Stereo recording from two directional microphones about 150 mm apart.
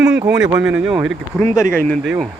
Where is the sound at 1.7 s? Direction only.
10° left (ahead or behind).